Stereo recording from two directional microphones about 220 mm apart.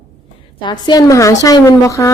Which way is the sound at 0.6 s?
20° left (ahead or behind).